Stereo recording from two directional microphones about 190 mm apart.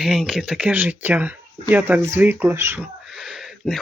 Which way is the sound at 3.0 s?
Centre (ahead or behind).